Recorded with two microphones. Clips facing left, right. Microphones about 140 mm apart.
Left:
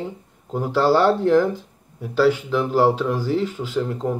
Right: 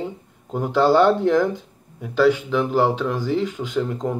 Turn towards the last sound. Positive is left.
turn(degrees=5)  # may be behind; listen again after turning